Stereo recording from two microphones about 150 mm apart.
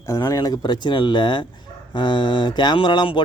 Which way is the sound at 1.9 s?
30° left (ahead or behind).